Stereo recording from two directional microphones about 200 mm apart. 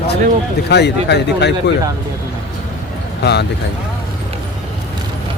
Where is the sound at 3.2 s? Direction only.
55° left (ahead or behind).